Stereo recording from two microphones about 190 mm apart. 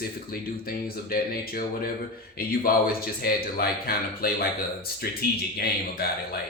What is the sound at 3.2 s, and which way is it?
A man's voice, 50° left (ahead or behind).